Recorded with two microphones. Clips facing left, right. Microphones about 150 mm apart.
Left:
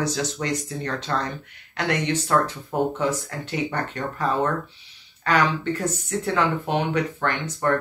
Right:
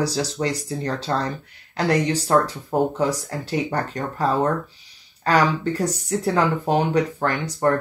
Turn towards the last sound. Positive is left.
turn(degrees=-35)  # may be behind; listen again after turning